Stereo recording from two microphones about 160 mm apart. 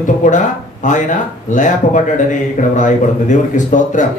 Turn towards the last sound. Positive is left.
turn(degrees=50)  # may be behind; listen again after turning